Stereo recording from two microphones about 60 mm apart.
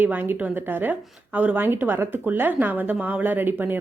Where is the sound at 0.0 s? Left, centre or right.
Right.